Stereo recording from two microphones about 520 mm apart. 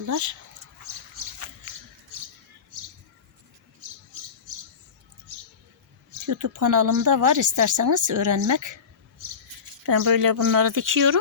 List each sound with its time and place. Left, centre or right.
0.0 s a woman's voice: right
6.2 s a woman's voice: right
9.8 s a woman's voice: right